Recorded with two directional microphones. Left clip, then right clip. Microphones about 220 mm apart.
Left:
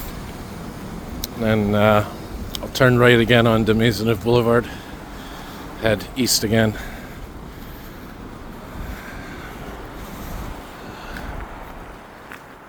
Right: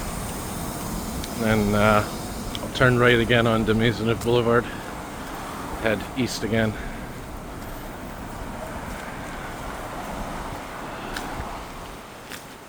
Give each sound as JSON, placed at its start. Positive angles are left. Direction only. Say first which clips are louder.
{"t": 1.2, "sound": "speech", "louder": "left 3 dB", "side_deg": 30}
{"t": 5.8, "sound": "speech", "louder": "left 5 dB", "side_deg": 35}